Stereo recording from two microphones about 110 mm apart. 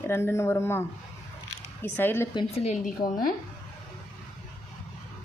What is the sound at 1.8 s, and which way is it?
Speech, 20° left (ahead or behind).